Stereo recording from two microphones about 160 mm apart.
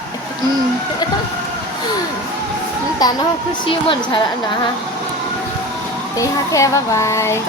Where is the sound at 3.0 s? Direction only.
25° left (ahead or behind).